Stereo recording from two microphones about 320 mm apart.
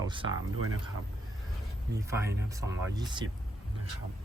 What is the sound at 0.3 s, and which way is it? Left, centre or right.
Speech, right.